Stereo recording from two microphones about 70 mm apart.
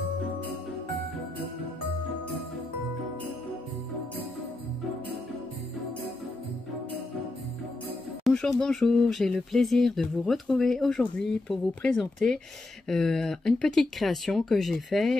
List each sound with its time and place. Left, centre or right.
8.3 s speech: centre
11.0 s speech: centre